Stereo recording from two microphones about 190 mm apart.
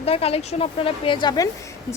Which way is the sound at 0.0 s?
30° left (ahead or behind).